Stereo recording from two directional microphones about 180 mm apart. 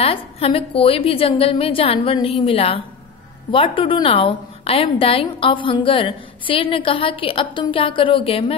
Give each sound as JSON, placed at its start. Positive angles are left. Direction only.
{"t": 0.0, "sound": "a woman's voice", "side_deg": 30}